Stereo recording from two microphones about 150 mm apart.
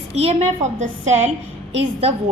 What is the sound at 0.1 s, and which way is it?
A woman's voice, 45° right (ahead or behind).